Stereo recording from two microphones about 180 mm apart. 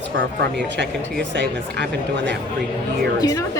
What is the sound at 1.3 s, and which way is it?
Speech, 75° right (ahead or behind).